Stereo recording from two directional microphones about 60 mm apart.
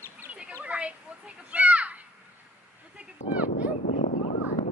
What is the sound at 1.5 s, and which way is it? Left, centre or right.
Children playing, right.